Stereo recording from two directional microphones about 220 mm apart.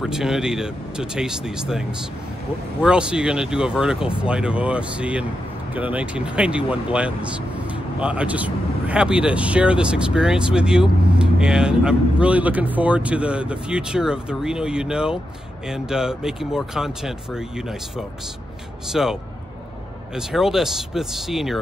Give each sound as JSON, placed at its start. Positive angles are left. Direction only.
{"t": 0.0, "sound": "speech", "side_deg": 0}
{"t": 20.2, "sound": "speech", "side_deg": 0}